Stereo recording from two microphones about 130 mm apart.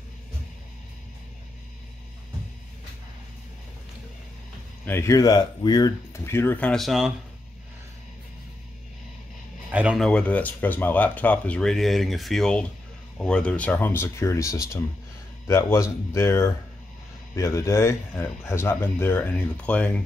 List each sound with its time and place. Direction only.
4.8 s speech: 20° left (ahead or behind); by 7.1 s centre (ahead or behind)
9.7 s a sound: 10° right (ahead or behind)
9.9 s speech: 5° left (ahead or behind)